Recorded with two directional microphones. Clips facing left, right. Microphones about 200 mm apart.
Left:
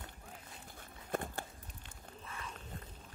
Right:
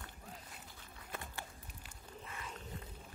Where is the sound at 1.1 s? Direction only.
50° left (ahead or behind).